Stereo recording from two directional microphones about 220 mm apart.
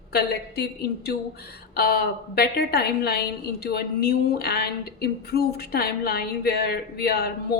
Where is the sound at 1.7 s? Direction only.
45° left (ahead or behind).